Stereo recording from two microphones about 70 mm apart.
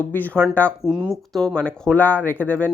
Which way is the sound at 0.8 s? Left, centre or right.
Centre.